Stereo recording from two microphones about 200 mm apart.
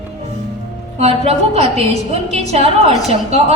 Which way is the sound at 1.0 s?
30° right (ahead or behind).